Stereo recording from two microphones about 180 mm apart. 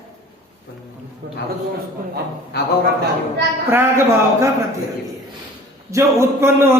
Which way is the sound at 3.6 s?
15° right (ahead or behind).